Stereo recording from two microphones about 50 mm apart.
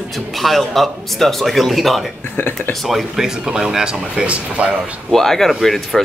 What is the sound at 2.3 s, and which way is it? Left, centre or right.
Speech, left.